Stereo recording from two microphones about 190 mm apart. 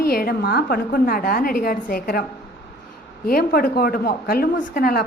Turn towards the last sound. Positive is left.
turn(degrees=50)  # may be behind; listen again after turning